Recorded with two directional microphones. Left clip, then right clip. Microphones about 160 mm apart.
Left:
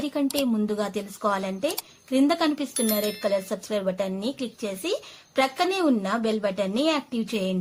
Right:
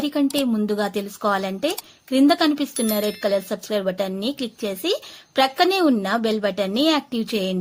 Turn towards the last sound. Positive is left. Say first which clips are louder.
# right 4 dB
turn(degrees=-35)  # may be behind; listen again after turning